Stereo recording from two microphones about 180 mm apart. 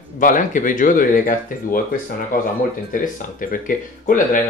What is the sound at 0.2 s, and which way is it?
Speech, 45° left (ahead or behind).